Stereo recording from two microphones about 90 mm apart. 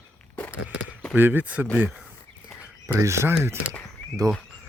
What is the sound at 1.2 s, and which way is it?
Speech, 20° right (ahead or behind).